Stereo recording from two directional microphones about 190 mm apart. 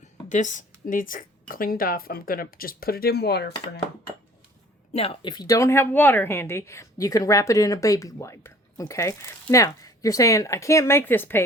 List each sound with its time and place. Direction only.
0.0 s speech: 40° left (ahead or behind); by 3.8 s 60° left (ahead or behind)
4.9 s a woman's voice: 25° left (ahead or behind); by 11.4 s 10° left (ahead or behind)